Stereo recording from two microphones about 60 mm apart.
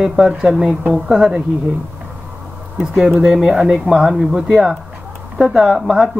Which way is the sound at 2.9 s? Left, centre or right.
Centre.